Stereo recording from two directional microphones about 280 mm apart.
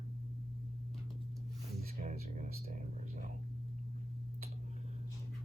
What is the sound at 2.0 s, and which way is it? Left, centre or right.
Speech, right.